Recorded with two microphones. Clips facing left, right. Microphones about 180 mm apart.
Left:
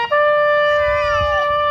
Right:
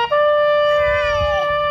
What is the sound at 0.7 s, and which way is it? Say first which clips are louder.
Shofar: even; 30° right (ahead or behind).